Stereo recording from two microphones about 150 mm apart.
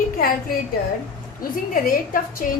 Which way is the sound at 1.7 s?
70° left (ahead or behind).